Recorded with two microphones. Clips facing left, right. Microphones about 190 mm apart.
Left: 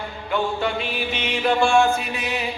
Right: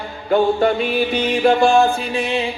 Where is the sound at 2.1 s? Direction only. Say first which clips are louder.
Right 7 dB; 30° right (ahead or behind).